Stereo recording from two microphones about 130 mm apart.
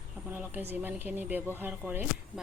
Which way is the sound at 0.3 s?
15° right (ahead or behind).